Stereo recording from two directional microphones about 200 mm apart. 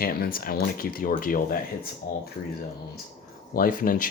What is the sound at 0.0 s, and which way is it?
Speech, 45° left (ahead or behind).